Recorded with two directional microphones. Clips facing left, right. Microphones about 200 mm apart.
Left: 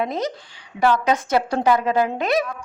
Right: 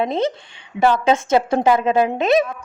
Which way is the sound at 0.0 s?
25° right (ahead or behind).